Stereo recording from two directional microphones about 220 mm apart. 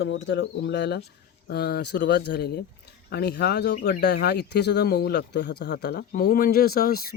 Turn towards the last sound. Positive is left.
turn(degrees=45)  # may be behind; listen again after turning